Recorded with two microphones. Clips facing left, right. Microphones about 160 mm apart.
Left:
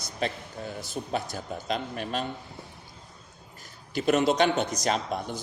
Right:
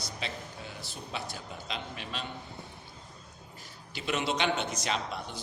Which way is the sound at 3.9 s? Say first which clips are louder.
Left 9 dB; 45° left (ahead or behind).